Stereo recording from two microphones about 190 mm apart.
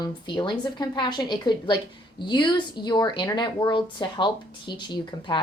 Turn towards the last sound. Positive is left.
turn(degrees=25)  # may be behind; listen again after turning